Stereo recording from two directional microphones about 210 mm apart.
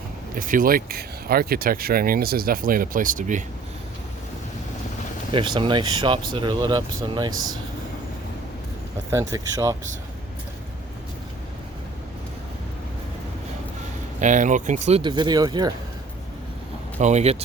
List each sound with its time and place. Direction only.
0.3 s speech: 40° right (ahead or behind)
5.3 s speech: 25° right (ahead or behind)
9.0 s speech: 15° right (ahead or behind)
14.2 s speech: 35° right (ahead or behind); by 15.7 s 20° right (ahead or behind)
17.0 s speech: 35° right (ahead or behind)